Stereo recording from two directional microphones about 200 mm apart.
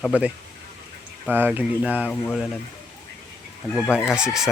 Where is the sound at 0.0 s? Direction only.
5° right (ahead or behind).